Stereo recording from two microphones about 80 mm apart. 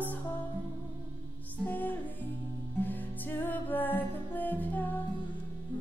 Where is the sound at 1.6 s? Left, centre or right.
Left.